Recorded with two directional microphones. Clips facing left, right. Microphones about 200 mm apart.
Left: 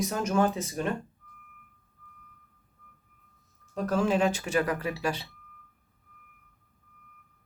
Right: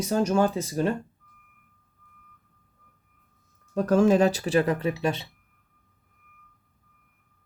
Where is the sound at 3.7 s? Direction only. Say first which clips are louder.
Right 7 dB; 45° right (ahead or behind); by 5.2 s 25° right (ahead or behind).